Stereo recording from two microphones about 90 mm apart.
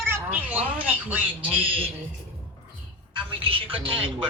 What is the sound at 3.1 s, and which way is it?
Speech, 80° right.